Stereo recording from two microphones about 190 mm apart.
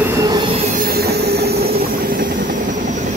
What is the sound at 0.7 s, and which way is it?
Train, 55° right (ahead or behind).